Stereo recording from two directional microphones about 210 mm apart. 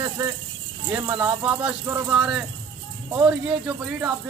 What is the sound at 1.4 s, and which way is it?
Speech, 10° right (ahead or behind).